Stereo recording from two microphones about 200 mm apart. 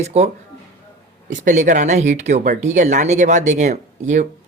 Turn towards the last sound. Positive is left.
turn(degrees=-40)  # may be behind; listen again after turning